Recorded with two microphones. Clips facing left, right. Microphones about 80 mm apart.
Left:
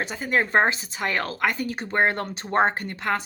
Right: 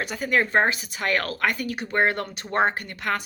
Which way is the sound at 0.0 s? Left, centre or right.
Left.